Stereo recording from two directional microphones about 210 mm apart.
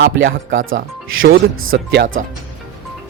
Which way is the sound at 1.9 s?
65° right (ahead or behind).